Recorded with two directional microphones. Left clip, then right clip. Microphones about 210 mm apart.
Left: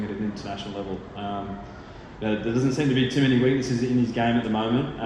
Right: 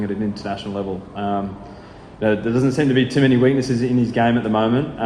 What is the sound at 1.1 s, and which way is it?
A man's voice, 55° right (ahead or behind).